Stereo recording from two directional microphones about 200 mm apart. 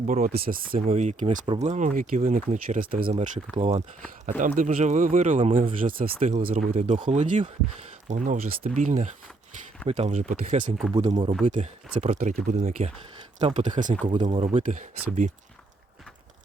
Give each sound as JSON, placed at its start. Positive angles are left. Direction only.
{"t": 0.0, "sound": "speech", "side_deg": -40}
{"t": 3.5, "sound": "speech", "side_deg": -30}
{"t": 10.9, "sound": "speech", "side_deg": -25}
{"t": 11.4, "sound": "speech", "side_deg": -35}